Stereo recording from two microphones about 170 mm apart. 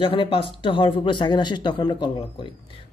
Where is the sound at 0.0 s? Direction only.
30° left (ahead or behind).